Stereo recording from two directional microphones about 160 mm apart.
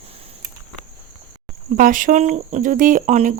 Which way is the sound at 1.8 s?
55° right (ahead or behind).